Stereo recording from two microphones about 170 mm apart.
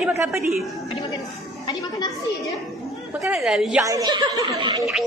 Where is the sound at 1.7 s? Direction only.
25° left (ahead or behind).